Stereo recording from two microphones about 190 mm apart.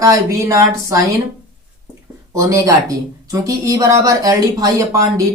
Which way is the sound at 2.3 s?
15° right (ahead or behind).